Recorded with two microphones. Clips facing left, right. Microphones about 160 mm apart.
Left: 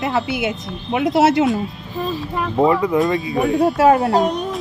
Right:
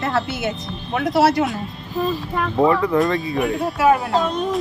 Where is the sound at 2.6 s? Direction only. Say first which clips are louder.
Left 1 dB; 20° left (ahead or behind).